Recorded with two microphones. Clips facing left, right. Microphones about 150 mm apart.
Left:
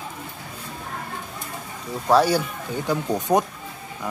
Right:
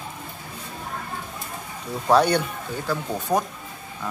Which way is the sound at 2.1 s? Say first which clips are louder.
Even; 5° left (ahead or behind).